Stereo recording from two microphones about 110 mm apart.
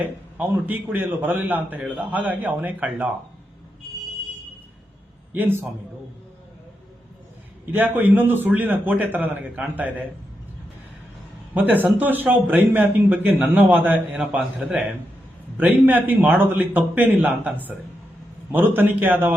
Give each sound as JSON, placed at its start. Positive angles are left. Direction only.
{"t": 0.0, "sound": "a man's voice", "side_deg": -15}
{"t": 5.3, "sound": "a man's voice", "side_deg": -15}
{"t": 7.9, "sound": "a man's voice", "side_deg": -15}
{"t": 11.5, "sound": "a man's voice", "side_deg": -15}